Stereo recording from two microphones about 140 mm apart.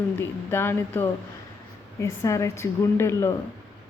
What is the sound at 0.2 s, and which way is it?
A woman's voice, 15° left (ahead or behind).